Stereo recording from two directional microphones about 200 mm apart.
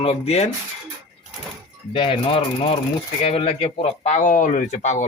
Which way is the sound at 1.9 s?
25° left (ahead or behind).